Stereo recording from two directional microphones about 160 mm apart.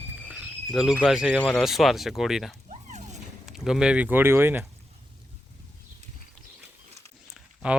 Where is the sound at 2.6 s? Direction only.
45° right (ahead or behind).